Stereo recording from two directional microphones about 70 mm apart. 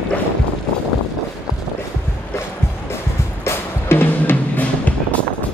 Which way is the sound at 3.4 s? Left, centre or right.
Left.